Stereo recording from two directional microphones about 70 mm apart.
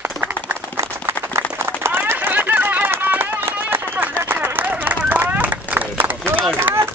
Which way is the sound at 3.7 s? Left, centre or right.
Right.